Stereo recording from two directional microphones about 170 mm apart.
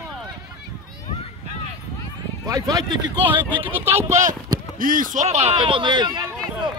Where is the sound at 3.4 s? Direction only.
10° right (ahead or behind).